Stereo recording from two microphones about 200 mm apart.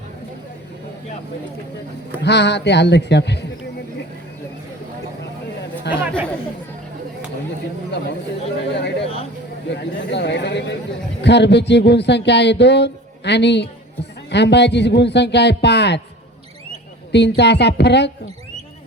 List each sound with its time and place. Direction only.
2.2 s speech: 60° left (ahead or behind)
5.8 s speech: 55° left (ahead or behind)
8.7 s speech: 60° left (ahead or behind)
17.1 s speech: 60° left (ahead or behind)